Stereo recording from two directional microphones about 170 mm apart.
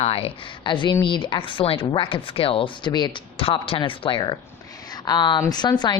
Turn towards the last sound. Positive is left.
turn(degrees=25)  # may be behind; listen again after turning